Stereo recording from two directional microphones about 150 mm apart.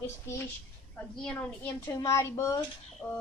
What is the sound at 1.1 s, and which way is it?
Speech, 5° left (ahead or behind).